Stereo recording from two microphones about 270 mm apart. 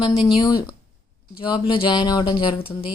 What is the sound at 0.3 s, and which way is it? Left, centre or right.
Speech, centre.